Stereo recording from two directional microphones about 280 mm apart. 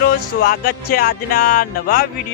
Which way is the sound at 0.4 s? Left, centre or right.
Left.